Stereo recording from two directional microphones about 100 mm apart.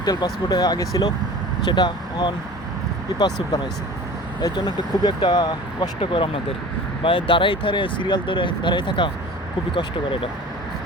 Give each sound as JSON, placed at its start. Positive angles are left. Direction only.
{"t": 0.0, "sound": "speech", "side_deg": 45}
{"t": 6.0, "sound": "speech", "side_deg": 65}